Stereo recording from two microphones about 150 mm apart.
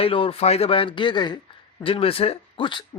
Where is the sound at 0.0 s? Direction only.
40° left (ahead or behind).